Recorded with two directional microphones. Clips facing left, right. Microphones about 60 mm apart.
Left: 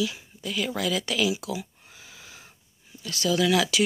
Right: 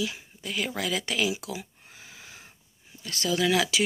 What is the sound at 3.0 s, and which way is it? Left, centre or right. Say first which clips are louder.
Speech: left 3 dB; right.